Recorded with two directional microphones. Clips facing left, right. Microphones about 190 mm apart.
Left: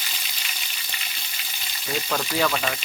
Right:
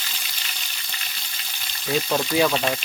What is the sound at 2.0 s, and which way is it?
Speech, 15° right (ahead or behind).